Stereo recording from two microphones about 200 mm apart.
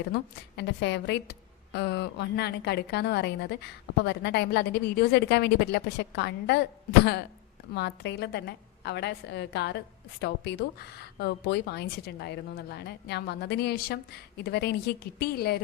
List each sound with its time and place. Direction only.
0.1 s a woman's voice: 60° left (ahead or behind)